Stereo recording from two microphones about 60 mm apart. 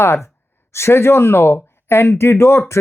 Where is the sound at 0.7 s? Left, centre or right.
Left.